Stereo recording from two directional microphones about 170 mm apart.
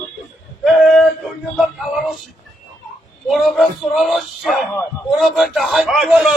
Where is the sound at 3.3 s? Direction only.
Centre (ahead or behind).